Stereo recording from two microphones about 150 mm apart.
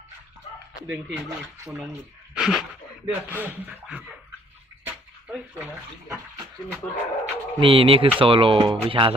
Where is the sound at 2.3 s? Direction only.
5° right (ahead or behind).